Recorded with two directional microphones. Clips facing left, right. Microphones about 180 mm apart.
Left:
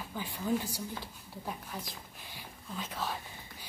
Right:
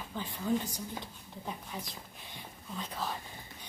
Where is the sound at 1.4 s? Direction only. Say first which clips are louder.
Even; centre (ahead or behind).